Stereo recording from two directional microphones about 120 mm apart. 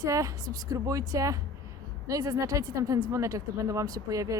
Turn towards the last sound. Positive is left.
turn(degrees=-30)  # may be behind; listen again after turning